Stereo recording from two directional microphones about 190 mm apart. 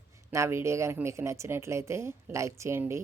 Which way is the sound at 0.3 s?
15° right (ahead or behind).